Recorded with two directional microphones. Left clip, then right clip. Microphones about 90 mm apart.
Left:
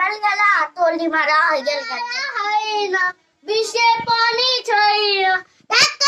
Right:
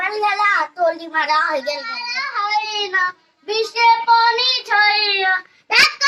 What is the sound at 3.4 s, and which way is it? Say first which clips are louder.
Child singing: left 1 dB; 30° left (ahead or behind).